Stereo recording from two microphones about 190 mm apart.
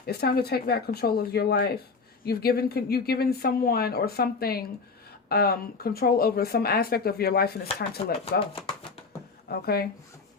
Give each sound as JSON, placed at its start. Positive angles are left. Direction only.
{"t": 0.0, "sound": "speech", "side_deg": 55}
{"t": 7.9, "sound": "speech", "side_deg": 30}
{"t": 9.5, "sound": "speech", "side_deg": 55}